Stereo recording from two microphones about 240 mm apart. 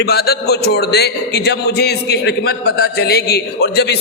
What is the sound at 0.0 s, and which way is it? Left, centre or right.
A man's voice, left.